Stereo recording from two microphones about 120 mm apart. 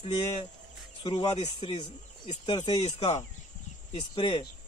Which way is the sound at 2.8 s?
65° left (ahead or behind).